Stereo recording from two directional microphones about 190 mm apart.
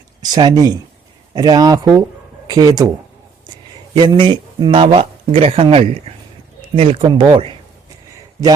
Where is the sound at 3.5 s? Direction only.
20° right (ahead or behind).